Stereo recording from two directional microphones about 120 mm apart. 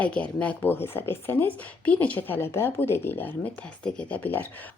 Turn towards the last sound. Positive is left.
turn(degrees=15)  # may be behind; listen again after turning